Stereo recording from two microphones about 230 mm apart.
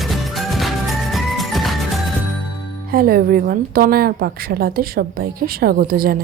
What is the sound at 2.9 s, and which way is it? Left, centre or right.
A woman's voice, right.